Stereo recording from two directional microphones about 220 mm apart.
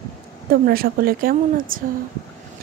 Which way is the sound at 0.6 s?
40° right (ahead or behind).